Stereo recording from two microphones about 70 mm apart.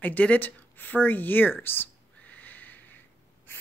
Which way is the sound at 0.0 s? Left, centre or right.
Left.